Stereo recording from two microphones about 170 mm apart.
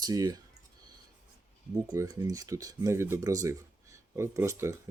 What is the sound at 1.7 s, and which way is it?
Speech, 20° right (ahead or behind).